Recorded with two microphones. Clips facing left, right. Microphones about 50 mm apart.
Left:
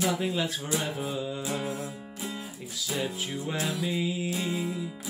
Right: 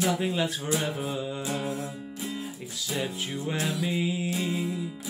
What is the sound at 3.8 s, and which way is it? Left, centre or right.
Music, centre.